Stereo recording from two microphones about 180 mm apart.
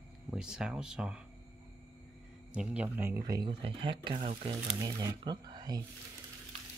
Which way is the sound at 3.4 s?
30° right (ahead or behind).